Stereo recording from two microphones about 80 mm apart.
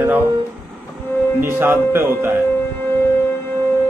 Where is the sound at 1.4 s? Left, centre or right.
Right.